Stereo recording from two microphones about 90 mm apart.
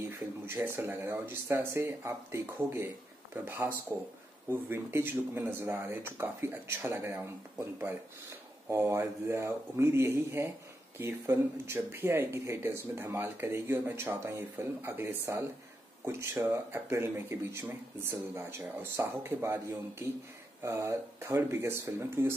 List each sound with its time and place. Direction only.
0.5 s speech: 25° right (ahead or behind)
8.6 s speech: 30° right (ahead or behind)